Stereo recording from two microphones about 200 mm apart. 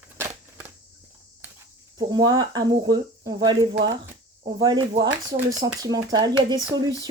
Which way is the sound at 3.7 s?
65° right (ahead or behind).